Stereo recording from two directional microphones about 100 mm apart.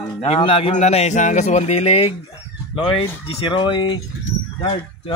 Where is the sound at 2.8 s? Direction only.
70° left (ahead or behind).